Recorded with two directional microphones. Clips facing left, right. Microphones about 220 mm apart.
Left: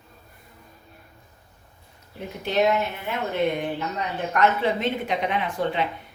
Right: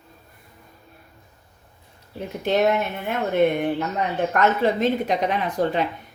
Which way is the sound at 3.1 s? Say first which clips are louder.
Right 6 dB; 50° right (ahead or behind).